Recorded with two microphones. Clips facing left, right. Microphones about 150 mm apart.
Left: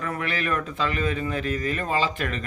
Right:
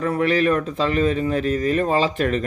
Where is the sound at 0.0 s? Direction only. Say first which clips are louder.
Right 10 dB; 35° right (ahead or behind).